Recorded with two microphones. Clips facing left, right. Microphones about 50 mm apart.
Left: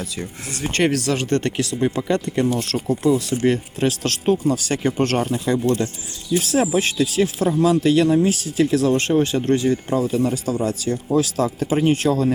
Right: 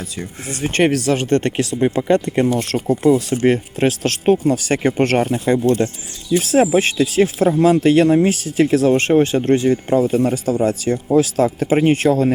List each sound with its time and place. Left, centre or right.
0.0 s speech: centre; by 4.8 s right
4.8 s speech: right